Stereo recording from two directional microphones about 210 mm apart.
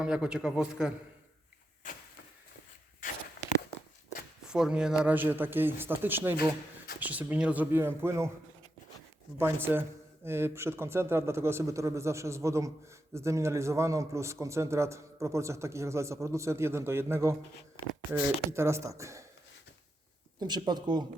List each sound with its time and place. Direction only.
0.0 s a man's voice: 5° right (ahead or behind)
4.4 s a man's voice: 5° right (ahead or behind)
9.4 s a man's voice: 10° right (ahead or behind)
20.4 s speech: 20° right (ahead or behind)